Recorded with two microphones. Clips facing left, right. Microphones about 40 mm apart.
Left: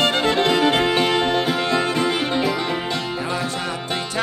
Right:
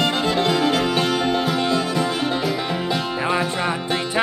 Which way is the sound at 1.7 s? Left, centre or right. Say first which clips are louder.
Left 1 dB; left.